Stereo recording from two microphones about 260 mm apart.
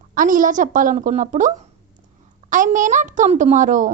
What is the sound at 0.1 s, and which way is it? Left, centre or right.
A woman's voice, right.